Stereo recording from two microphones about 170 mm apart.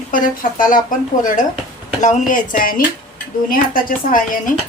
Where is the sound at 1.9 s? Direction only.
50° left (ahead or behind).